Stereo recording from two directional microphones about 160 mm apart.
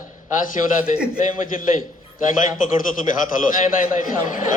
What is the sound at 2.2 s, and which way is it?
A man's voice, 55° left (ahead or behind).